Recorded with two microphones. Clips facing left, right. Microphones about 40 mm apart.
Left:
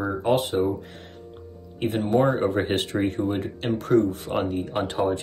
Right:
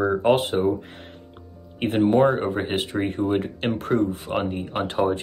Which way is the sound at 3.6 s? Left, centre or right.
Right.